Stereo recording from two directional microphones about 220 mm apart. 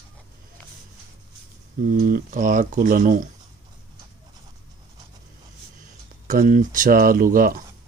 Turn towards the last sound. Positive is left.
turn(degrees=-40)  # may be behind; listen again after turning